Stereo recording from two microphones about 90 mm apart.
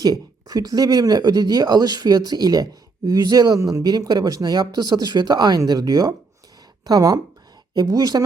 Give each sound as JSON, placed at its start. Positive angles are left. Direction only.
{"t": 0.0, "sound": "speech", "side_deg": -45}